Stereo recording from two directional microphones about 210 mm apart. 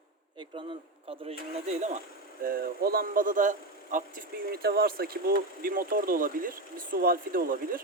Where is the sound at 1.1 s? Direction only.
30° right (ahead or behind).